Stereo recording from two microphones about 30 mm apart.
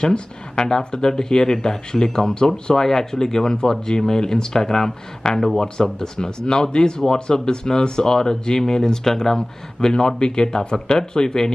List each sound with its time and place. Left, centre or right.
0.0 s speech: left
9.4 s speech: left